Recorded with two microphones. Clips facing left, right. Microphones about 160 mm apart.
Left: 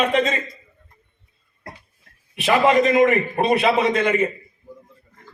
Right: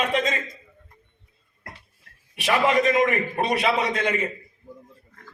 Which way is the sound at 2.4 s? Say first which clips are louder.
Left 4 dB; 25° left (ahead or behind).